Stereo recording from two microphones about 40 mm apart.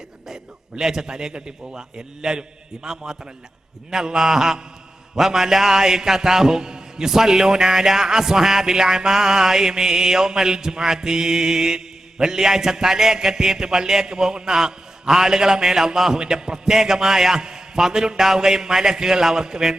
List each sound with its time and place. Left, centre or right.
0.8 s mantra: centre